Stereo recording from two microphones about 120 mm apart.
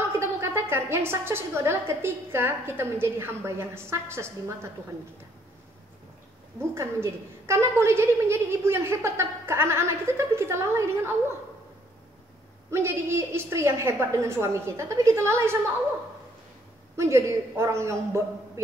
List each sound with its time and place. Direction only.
0.2 s a woman's voice: 20° right (ahead or behind)
6.7 s a woman's voice: 20° right (ahead or behind)
12.7 s a woman's voice: 20° right (ahead or behind)
16.9 s a woman's voice: 25° right (ahead or behind)